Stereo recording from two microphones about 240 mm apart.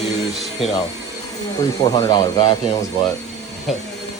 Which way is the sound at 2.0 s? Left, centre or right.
Centre.